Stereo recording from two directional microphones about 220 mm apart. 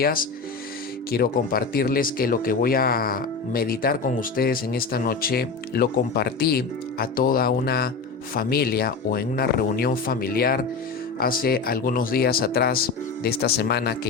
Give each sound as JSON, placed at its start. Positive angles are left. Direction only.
{"t": 0.0, "sound": "speech", "side_deg": 40}